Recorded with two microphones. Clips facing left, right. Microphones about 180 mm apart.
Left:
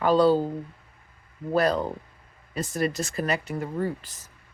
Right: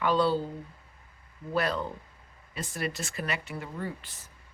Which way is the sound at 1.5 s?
40° left (ahead or behind).